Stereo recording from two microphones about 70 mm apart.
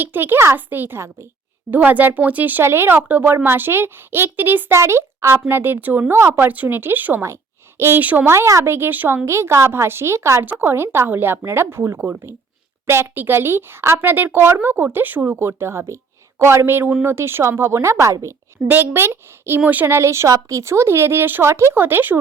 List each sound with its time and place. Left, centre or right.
0.0 s speech: right
1.7 s speech: right
4.8 s speech: right
8.0 s speech: right
8.3 s speech: right
9.2 s speech: right
10.4 s speech: right
11.9 s speech: right
12.8 s speech: right
18.7 s speech: right
19.6 s speech: right
19.9 s speech: right